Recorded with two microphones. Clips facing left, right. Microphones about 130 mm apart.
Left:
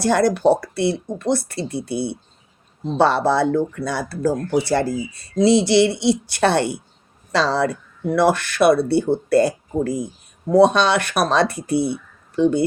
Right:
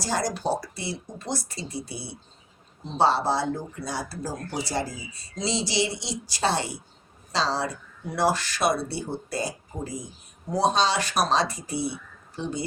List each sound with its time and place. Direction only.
0.0 s speech: 60° left (ahead or behind)